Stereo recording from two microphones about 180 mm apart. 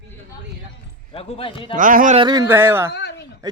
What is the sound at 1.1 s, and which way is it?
Speech, 30° left (ahead or behind).